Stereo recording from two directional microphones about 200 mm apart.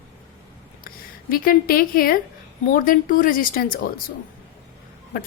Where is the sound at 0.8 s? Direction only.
45° left (ahead or behind).